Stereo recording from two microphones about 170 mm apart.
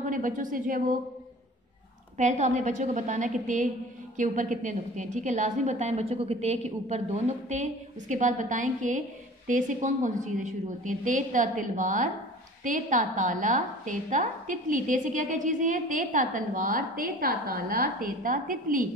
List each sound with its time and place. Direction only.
0.0 s a woman's voice: 50° right (ahead or behind)
2.1 s a woman's voice: 45° right (ahead or behind)